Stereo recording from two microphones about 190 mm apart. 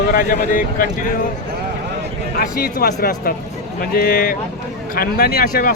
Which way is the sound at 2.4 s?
50° left (ahead or behind).